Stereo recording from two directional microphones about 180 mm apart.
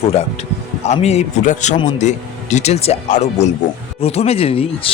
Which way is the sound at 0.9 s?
35° left (ahead or behind).